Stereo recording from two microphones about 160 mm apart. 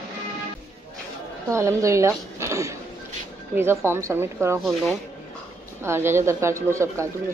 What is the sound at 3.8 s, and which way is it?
Speech, 15° right (ahead or behind).